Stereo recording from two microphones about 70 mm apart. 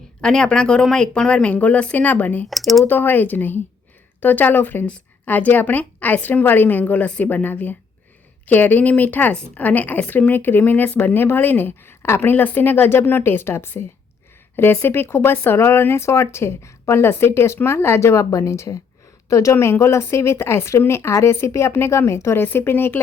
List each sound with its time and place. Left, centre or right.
0.2 s speech: centre
2.5 s speech: centre
2.8 s a woman's voice: left
22.4 s speech: left